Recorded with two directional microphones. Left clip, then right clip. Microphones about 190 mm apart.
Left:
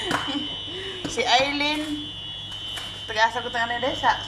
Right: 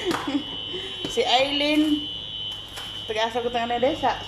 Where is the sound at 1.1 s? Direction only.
15° right (ahead or behind).